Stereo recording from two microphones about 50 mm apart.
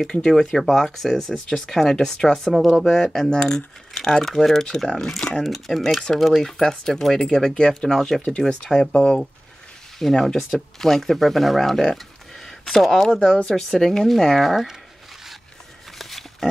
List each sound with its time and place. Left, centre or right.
0.1 s speech: centre
2.5 s speech: centre
9.9 s speech: centre
13.1 s speech: centre
16.0 s a sound: centre